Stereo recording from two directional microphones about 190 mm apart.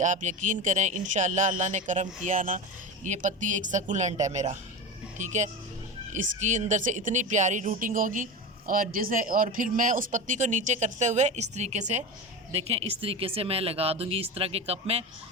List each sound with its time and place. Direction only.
0.0 s a woman's voice: 40° right (ahead or behind)